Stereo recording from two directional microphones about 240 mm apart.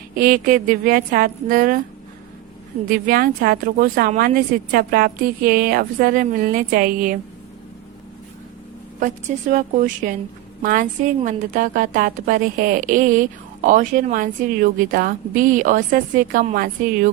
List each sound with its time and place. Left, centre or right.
0.1 s a woman's voice: right
2.9 s a woman's voice: right
9.0 s a woman's voice: right